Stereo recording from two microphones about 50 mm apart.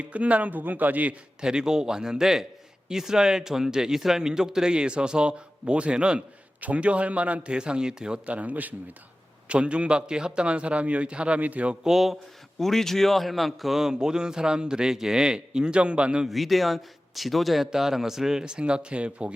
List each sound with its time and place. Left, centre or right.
0.0 s speech: right
1.4 s a man's voice: centre; by 11.7 s right
11.7 s speech: centre
12.5 s speech: centre; by 16.2 s right
16.3 s a man's voice: centre; by 19.3 s right